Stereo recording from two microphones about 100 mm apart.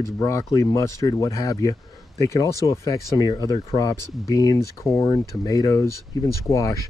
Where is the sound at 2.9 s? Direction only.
45° left (ahead or behind).